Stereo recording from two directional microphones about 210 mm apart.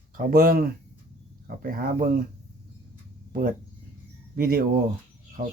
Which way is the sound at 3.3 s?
45° right (ahead or behind).